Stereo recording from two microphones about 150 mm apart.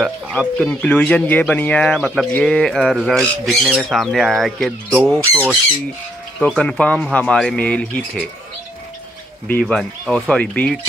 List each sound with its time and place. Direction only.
0.0 s speech: centre (ahead or behind)
6.4 s speech: 5° left (ahead or behind)
9.5 s speech: 5° left (ahead or behind)